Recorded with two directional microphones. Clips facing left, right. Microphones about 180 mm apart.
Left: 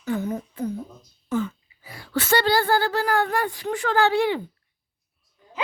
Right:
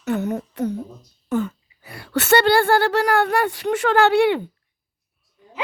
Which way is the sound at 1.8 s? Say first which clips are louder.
Right 3 dB; 65° right (ahead or behind).